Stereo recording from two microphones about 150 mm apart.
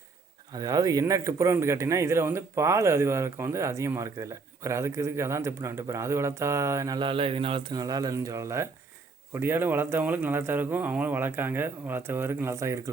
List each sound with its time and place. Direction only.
0.5 s speech: 25° right (ahead or behind)